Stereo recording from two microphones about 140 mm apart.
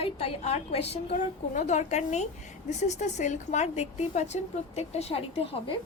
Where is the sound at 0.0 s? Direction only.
50° left (ahead or behind).